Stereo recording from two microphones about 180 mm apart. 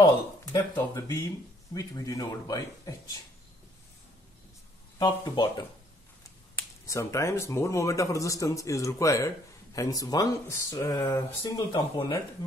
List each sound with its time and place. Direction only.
0.0 s speech: 20° left (ahead or behind)
4.9 s speech: 25° left (ahead or behind)